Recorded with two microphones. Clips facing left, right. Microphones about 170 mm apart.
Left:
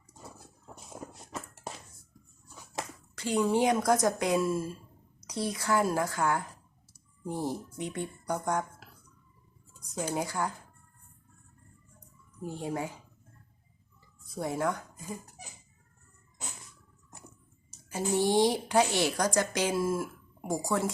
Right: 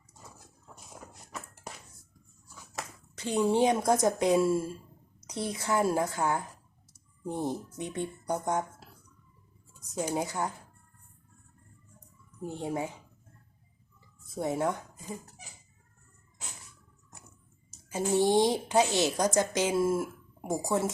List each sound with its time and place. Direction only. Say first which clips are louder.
3.2 s a woman's voice: right 1 dB; 25° right (ahead or behind)
10.0 s a woman's voice: right 1 dB; 15° right (ahead or behind)
12.5 s a woman's voice: right 1 dB; 20° right (ahead or behind)
14.3 s a woman's voice: right 1 dB; 20° right (ahead or behind)
17.8 s a woman's voice: right 2 dB; 20° right (ahead or behind)